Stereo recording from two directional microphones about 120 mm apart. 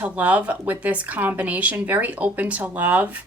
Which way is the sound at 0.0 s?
10° right (ahead or behind).